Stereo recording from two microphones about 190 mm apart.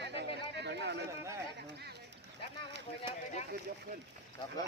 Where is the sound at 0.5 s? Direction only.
65° right (ahead or behind).